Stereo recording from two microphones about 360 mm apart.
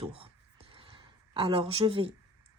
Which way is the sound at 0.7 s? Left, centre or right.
Centre.